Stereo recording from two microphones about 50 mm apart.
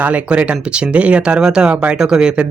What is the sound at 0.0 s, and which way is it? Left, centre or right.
A man's voice, right.